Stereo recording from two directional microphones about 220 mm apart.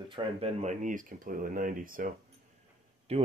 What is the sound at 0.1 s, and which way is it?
Speech, 25° right (ahead or behind).